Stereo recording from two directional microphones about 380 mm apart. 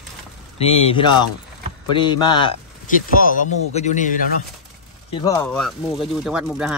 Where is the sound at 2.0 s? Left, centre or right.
Centre.